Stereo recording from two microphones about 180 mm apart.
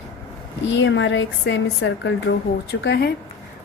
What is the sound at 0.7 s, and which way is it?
A woman's voice, 90° left.